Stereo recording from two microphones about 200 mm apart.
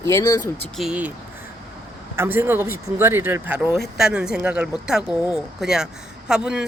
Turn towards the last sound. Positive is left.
turn(degrees=-5)  # may be behind; listen again after turning